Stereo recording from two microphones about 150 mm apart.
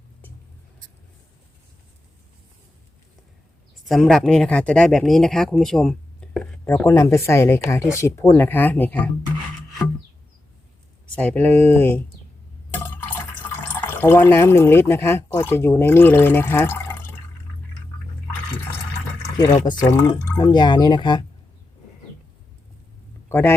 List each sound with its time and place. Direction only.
3.8 s speech: centre (ahead or behind)
6.7 s speech: 15° left (ahead or behind)
11.1 s speech: 10° left (ahead or behind)
19.6 s speech: 25° left (ahead or behind)
20.4 s speech: 30° left (ahead or behind)
23.3 s speech: 15° left (ahead or behind)